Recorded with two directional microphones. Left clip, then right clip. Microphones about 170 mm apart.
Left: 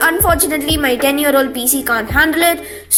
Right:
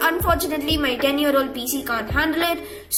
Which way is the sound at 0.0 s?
30° left (ahead or behind).